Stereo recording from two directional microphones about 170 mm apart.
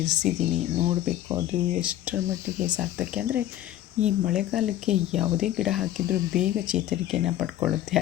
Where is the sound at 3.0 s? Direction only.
5° right (ahead or behind).